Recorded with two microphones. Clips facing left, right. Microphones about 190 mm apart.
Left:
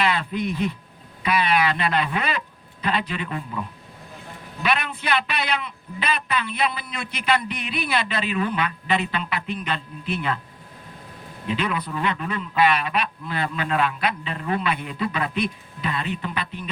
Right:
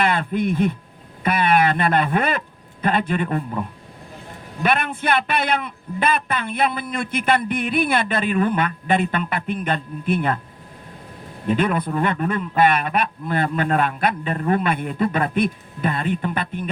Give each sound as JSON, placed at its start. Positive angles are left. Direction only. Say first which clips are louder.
{"t": 0.0, "sound": "a man's voice", "louder": "right 3 dB", "side_deg": -50}
{"t": 11.4, "sound": "a man's voice", "louder": "right 6 dB", "side_deg": -50}